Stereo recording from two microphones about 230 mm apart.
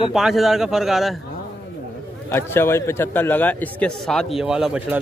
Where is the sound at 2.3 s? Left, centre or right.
Centre.